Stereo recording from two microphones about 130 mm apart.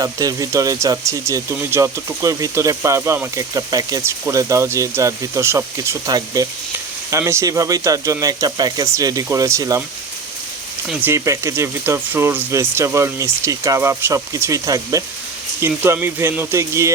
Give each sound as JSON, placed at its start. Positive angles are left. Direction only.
{"t": 0.0, "sound": "speech", "side_deg": -25}
{"t": 11.0, "sound": "speech", "side_deg": -20}